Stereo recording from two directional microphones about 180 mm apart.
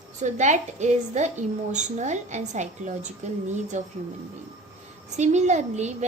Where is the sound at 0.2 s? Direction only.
40° right (ahead or behind).